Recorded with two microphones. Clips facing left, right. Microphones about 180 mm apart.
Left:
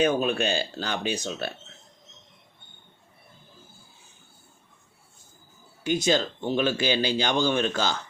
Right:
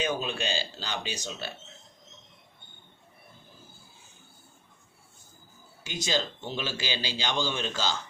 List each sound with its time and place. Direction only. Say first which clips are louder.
0.0 s speech: left 7 dB; 55° left (ahead or behind)
5.8 s speech: left 7 dB; 55° left (ahead or behind)